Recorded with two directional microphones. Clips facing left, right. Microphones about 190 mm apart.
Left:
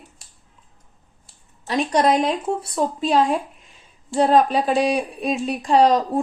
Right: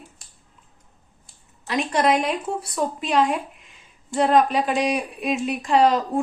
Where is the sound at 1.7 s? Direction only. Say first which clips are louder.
Left 2 dB; 35° left (ahead or behind).